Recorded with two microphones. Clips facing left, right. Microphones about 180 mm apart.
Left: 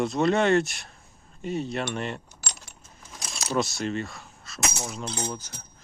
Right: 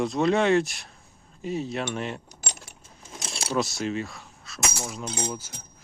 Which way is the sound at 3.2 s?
30° right (ahead or behind).